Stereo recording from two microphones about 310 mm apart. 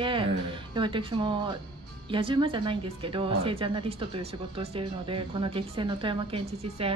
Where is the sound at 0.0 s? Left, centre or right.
Centre.